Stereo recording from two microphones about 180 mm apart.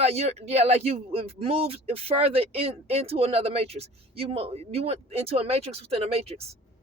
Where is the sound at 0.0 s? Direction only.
35° right (ahead or behind).